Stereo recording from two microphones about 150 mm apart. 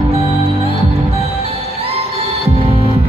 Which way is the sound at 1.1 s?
40° right (ahead or behind).